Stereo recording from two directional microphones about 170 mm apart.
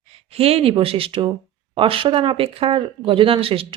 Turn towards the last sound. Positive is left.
turn(degrees=-35)  # may be behind; listen again after turning